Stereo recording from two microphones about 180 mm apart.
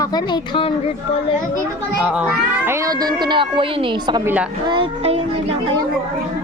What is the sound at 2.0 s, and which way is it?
A child's voice, 5° right (ahead or behind).